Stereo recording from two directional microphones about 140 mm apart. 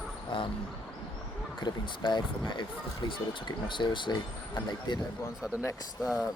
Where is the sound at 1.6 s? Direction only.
30° left (ahead or behind).